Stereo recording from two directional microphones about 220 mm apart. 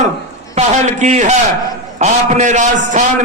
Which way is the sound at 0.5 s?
30° right (ahead or behind).